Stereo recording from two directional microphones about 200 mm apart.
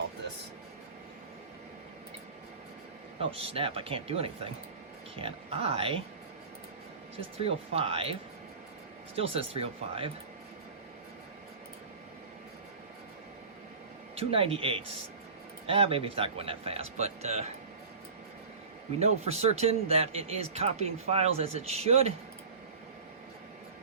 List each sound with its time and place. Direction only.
3.5 s speech: 30° right (ahead or behind)
7.4 s speech: 30° right (ahead or behind)
9.1 s speech: 30° right (ahead or behind)
14.2 s speech: 30° right (ahead or behind)
18.9 s a man's voice: 30° right (ahead or behind)